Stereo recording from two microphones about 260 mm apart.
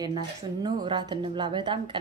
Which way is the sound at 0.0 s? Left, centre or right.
Centre.